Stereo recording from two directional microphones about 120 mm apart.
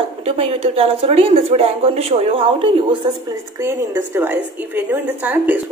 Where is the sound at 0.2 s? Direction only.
55° right (ahead or behind).